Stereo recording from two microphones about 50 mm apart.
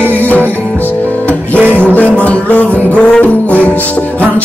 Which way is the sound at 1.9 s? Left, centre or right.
Left.